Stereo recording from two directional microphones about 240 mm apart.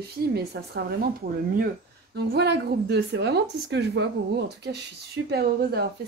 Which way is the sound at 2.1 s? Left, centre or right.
Right.